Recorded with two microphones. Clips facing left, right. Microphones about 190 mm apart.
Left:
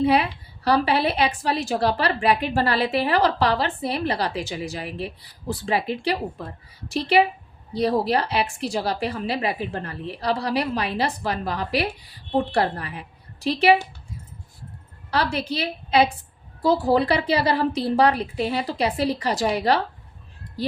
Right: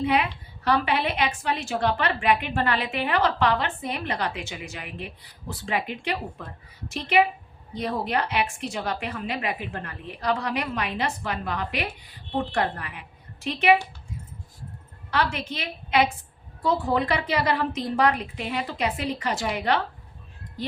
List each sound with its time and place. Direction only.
0.0 s a woman's voice: 35° left (ahead or behind)
15.1 s a woman's voice: 35° left (ahead or behind)